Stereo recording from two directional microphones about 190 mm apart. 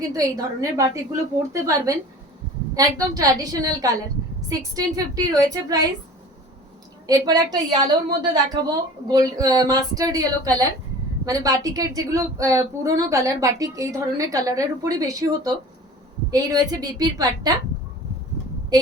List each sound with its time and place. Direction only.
0.1 s a woman's voice: 20° right (ahead or behind)
7.1 s a woman's voice: 20° right (ahead or behind)